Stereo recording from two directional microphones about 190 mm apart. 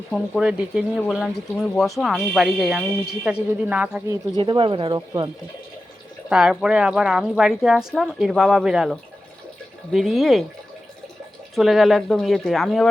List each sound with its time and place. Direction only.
0.1 s speech: 5° right (ahead or behind)
4.1 s speech: 25° right (ahead or behind)
6.2 s speech: 5° right (ahead or behind)
11.5 s speech: centre (ahead or behind)